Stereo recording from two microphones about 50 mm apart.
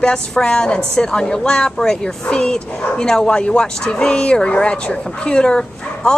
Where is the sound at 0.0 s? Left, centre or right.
Centre.